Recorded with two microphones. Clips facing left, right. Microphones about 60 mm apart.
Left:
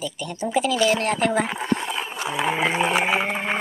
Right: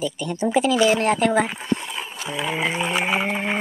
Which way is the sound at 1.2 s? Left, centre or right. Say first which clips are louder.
Right 2 dB; centre.